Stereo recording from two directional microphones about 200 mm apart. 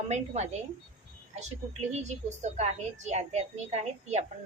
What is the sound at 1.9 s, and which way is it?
A woman's voice, 35° right (ahead or behind).